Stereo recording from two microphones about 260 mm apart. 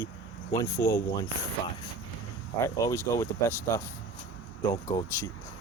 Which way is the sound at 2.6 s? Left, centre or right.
Centre.